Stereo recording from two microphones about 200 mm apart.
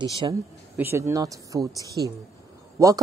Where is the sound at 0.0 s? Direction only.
20° right (ahead or behind).